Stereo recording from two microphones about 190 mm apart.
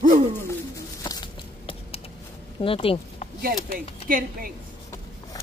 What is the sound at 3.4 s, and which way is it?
A woman's voice, 50° right (ahead or behind).